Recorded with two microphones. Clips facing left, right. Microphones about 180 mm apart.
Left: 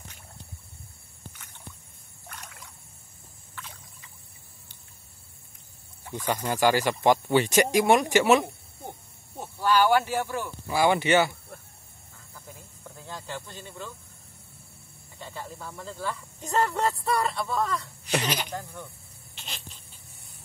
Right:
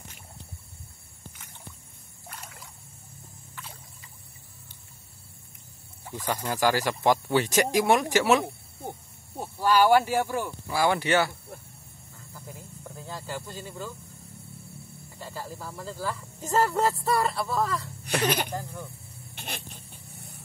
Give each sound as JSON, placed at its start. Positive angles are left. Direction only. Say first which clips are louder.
{"t": 2.2, "sound": "a sound", "louder": "right 1 dB", "side_deg": -5}
{"t": 6.2, "sound": "speech", "louder": "left 2 dB", "side_deg": 10}
{"t": 9.4, "sound": "speech", "louder": "right 1 dB", "side_deg": -10}
{"t": 10.8, "sound": "speech", "louder": "left 2 dB", "side_deg": 0}
{"t": 12.4, "sound": "a sound", "louder": "right 3 dB", "side_deg": -5}
{"t": 15.1, "sound": "speech", "louder": "right 1 dB", "side_deg": -5}
{"t": 18.2, "sound": "speech", "louder": "right 4 dB", "side_deg": -55}
{"t": 18.5, "sound": "speech", "louder": "right 2 dB", "side_deg": -10}
{"t": 19.3, "sound": "vehicle", "louder": "right 5 dB", "side_deg": -60}